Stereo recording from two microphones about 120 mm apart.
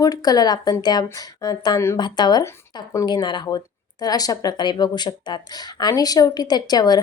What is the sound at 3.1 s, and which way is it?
A woman's voice, 40° left (ahead or behind).